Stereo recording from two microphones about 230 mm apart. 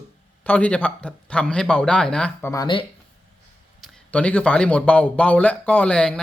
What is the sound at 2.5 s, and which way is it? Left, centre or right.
Speech, centre.